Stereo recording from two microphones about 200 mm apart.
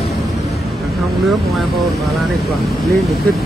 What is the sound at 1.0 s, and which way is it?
Speech, centre (ahead or behind).